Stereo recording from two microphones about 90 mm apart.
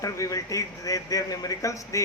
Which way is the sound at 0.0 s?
40° left (ahead or behind).